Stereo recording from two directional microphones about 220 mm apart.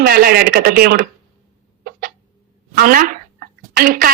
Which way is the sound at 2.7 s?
40° right (ahead or behind).